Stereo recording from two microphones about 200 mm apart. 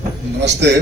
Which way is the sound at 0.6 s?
60° right (ahead or behind).